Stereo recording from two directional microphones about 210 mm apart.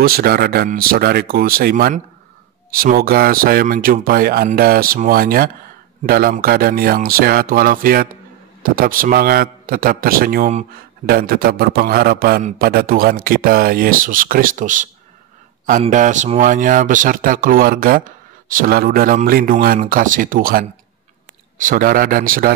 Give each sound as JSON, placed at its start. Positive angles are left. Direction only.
{"t": 0.0, "sound": "a man's voice", "side_deg": -45}